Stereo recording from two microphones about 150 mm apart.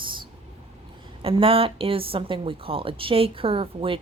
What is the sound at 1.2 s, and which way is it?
A woman's voice, 35° right (ahead or behind).